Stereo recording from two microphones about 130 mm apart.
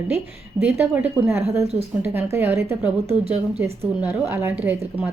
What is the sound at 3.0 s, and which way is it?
Speech, 50° right (ahead or behind).